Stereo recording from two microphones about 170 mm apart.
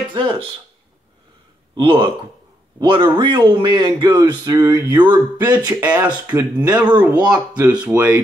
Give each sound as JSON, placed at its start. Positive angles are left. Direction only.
{"t": 0.1, "sound": "speech", "side_deg": -30}
{"t": 1.8, "sound": "speech", "side_deg": -30}
{"t": 6.2, "sound": "speech", "side_deg": -10}